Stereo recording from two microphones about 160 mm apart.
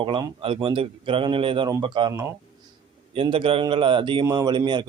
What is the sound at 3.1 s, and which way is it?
Speech, 35° right (ahead or behind).